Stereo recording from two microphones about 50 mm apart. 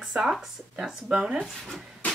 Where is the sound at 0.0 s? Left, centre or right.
Centre.